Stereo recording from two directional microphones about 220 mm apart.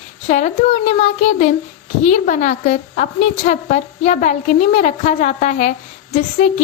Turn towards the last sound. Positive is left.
turn(degrees=30)  # may be behind; listen again after turning